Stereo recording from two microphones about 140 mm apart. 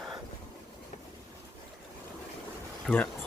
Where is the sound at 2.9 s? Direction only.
Centre (ahead or behind).